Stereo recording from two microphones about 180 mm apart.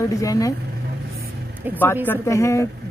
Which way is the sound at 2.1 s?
15° left (ahead or behind).